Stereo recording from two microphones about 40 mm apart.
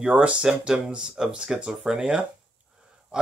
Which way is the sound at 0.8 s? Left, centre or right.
Centre.